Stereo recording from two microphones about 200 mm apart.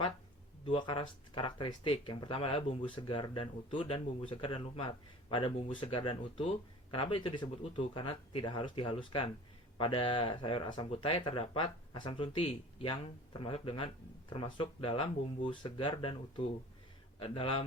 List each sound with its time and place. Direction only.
0.6 s speech: 25° left (ahead or behind)